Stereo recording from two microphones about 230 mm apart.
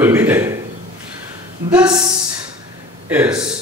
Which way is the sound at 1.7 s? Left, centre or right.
Centre.